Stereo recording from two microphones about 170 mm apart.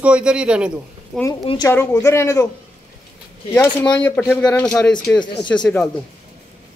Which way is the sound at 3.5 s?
25° left (ahead or behind).